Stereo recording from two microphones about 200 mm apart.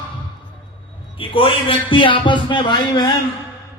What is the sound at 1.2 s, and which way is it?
A man's voice, 25° left (ahead or behind).